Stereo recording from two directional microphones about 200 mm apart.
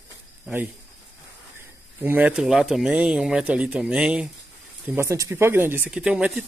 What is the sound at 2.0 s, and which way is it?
Speech, 10° right (ahead or behind).